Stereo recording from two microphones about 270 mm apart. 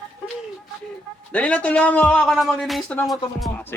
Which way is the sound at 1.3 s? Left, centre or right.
Centre.